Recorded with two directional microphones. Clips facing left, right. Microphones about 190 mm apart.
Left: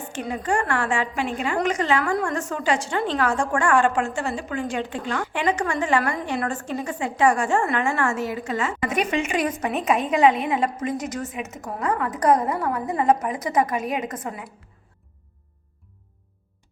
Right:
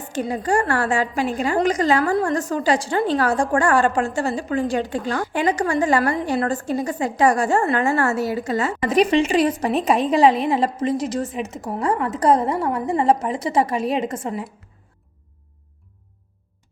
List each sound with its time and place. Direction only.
0.1 s a woman's voice: 35° right (ahead or behind)